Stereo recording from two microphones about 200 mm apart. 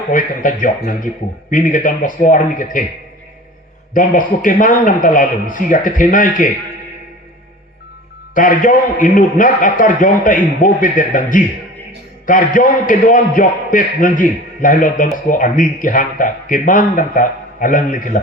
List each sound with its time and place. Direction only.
0.1 s a man's voice: 40° left (ahead or behind)
3.9 s a man's voice: 40° left (ahead or behind)
8.4 s a man's voice: 40° left (ahead or behind)